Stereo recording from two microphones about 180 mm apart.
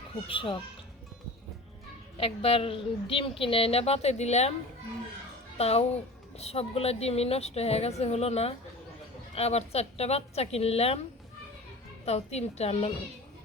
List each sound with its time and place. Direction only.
0.3 s speech: 30° left (ahead or behind)
2.1 s a woman's voice: 30° left (ahead or behind)
5.5 s a woman's voice: 35° left (ahead or behind)
12.0 s a woman's voice: 35° left (ahead or behind)